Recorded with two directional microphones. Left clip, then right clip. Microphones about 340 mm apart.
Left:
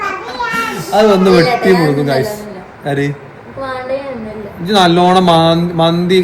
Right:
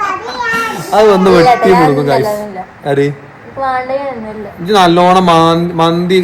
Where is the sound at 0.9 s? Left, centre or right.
Centre.